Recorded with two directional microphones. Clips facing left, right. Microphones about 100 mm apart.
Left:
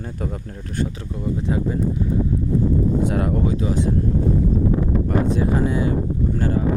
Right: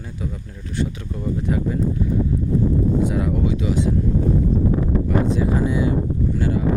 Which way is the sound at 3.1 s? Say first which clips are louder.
Left 1 dB; 55° left (ahead or behind).